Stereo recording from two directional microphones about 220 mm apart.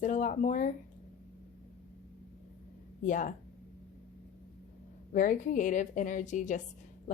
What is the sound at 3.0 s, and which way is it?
Speech, 35° left (ahead or behind).